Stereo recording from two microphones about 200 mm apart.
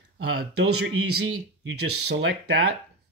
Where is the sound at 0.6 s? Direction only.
75° right (ahead or behind).